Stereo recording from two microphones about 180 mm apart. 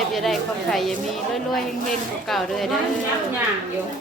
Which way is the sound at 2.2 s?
Centre (ahead or behind).